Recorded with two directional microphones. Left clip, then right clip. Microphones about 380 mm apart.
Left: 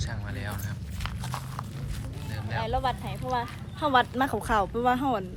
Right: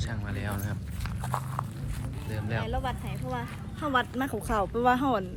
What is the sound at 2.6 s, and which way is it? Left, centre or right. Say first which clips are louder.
Speech: left 9 dB; left.